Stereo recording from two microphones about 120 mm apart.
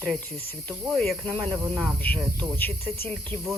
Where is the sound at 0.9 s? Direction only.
Centre (ahead or behind).